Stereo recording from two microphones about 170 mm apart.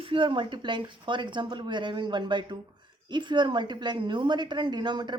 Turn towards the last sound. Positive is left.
turn(degrees=-25)  # may be behind; listen again after turning